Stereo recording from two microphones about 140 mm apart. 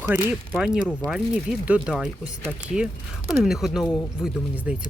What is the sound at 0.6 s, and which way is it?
Speech, 5° right (ahead or behind).